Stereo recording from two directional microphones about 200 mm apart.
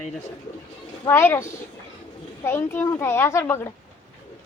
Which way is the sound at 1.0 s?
10° left (ahead or behind).